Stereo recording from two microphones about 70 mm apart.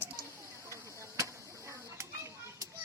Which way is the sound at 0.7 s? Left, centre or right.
Right.